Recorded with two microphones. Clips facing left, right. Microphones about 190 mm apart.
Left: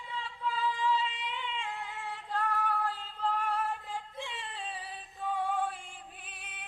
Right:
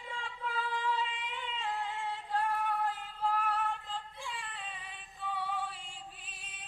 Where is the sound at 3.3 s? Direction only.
5° right (ahead or behind).